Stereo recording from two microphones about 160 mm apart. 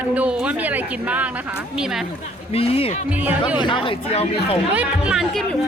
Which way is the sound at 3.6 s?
30° left (ahead or behind).